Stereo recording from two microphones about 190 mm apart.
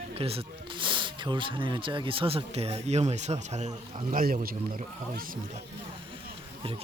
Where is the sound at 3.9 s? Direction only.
50° right (ahead or behind).